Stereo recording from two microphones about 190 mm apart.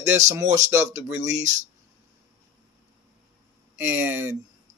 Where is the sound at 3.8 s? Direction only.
10° right (ahead or behind).